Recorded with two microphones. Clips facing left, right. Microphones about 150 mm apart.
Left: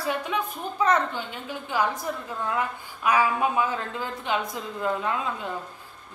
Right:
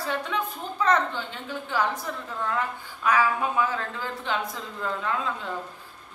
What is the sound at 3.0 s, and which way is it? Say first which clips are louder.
A man's voice: left 1 dB; 15° left (ahead or behind).